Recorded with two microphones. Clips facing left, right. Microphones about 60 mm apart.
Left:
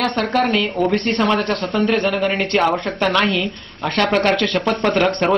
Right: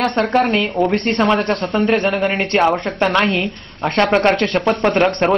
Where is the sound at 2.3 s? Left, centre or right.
Right.